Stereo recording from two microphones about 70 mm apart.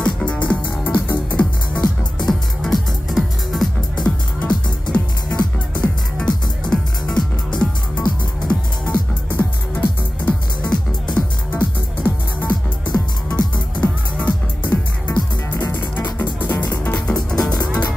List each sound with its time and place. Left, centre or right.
0.0 s music: centre
2.2 s music: centre
4.0 s music: centre
9.4 s music: left
17.1 s music: centre